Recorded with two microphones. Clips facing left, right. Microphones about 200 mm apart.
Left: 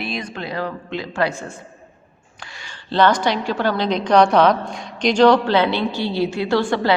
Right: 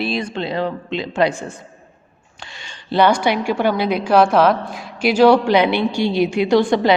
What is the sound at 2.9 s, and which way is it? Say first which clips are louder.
A woman's voice: right 2 dB; 10° right (ahead or behind).